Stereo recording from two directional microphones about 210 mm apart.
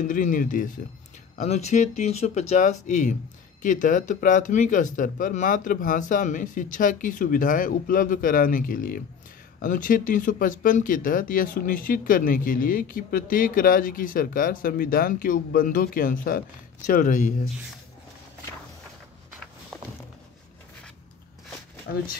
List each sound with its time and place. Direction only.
0.0 s speech: 40° left (ahead or behind)